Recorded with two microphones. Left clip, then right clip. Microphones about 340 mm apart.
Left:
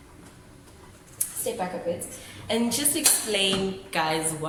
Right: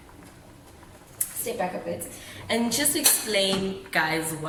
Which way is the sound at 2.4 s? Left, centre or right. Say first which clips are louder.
Right 1 dB; centre.